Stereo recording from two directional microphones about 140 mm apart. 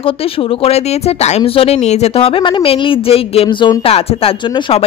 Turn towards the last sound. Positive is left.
turn(degrees=40)  # may be behind; listen again after turning